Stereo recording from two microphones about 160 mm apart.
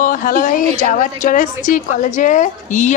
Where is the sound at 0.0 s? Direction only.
60° left (ahead or behind).